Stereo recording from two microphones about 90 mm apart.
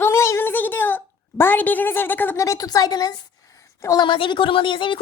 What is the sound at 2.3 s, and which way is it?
Speech, 35° left (ahead or behind).